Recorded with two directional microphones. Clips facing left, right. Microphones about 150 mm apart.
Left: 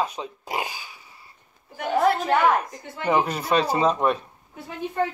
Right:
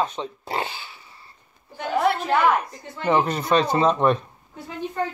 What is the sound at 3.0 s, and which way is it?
A man's voice, 10° left (ahead or behind).